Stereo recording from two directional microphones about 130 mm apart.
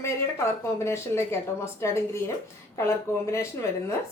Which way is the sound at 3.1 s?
20° left (ahead or behind).